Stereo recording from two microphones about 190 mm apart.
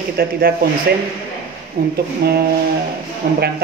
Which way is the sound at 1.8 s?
55° right (ahead or behind).